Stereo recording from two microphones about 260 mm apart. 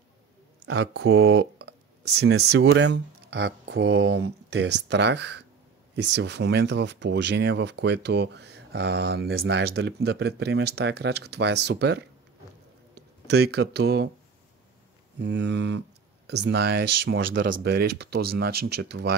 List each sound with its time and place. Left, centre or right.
0.7 s speech: right
15.1 s speech: right